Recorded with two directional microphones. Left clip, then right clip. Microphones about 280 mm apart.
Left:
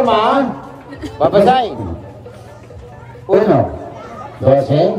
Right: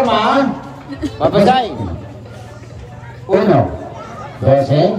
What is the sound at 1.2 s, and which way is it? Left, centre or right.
Speech, left.